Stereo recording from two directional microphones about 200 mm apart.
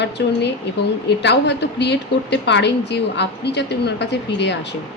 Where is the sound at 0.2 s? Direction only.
60° left (ahead or behind).